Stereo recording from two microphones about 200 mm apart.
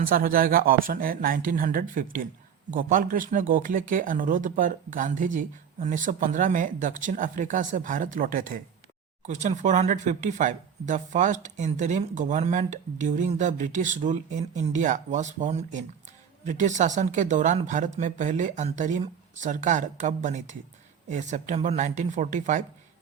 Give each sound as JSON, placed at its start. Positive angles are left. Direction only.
{"t": 0.0, "sound": "speech", "side_deg": -45}